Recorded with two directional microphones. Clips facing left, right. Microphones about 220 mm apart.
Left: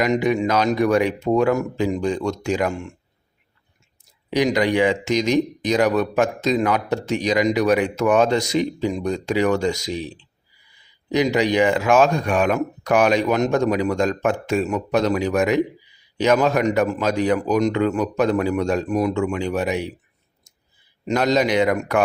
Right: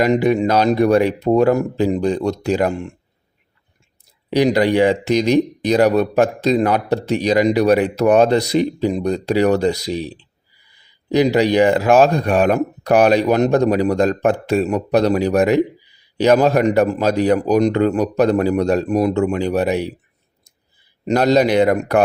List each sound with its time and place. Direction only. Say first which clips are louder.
0.0 s speech: right 4 dB; 35° right (ahead or behind)
4.3 s speech: right 4 dB; 35° right (ahead or behind)
21.1 s speech: right 4 dB; 35° right (ahead or behind)